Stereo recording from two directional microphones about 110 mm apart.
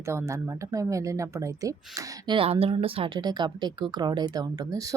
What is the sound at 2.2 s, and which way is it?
Speech, 55° right (ahead or behind).